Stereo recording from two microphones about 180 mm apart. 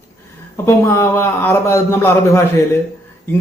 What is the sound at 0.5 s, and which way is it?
A man's voice, 15° left (ahead or behind).